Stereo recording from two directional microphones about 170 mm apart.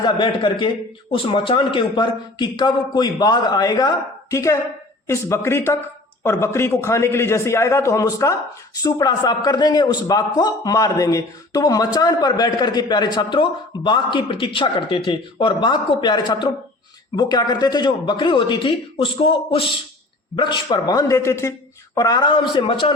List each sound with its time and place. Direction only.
0.0 s a man's voice: 30° left (ahead or behind)